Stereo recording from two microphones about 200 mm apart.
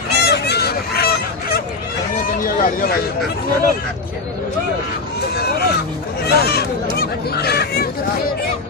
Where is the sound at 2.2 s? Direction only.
45° left (ahead or behind).